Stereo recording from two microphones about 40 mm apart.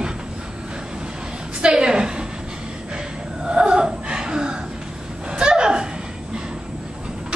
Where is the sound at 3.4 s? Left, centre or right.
Right.